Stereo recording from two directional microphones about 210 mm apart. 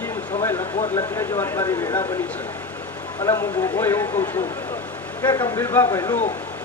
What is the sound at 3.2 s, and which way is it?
Speech, 15° left (ahead or behind).